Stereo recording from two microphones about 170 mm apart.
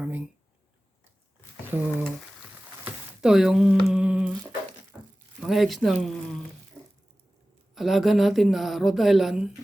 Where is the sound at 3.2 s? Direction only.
5° right (ahead or behind).